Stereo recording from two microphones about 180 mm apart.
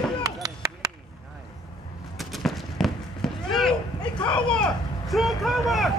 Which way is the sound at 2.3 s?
Centre (ahead or behind).